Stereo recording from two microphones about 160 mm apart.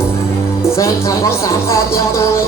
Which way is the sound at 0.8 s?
20° left (ahead or behind).